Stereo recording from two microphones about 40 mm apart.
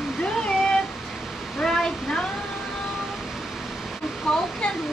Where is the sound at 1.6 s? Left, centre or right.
Centre.